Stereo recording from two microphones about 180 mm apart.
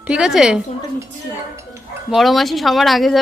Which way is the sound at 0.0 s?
5° right (ahead or behind).